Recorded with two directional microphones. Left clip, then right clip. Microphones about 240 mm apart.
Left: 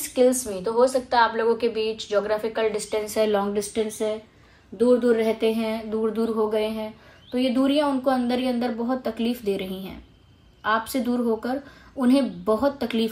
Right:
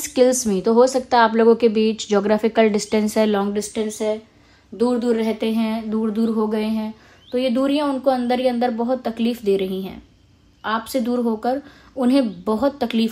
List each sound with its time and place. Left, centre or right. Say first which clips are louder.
0.0 s speech: right 4 dB; right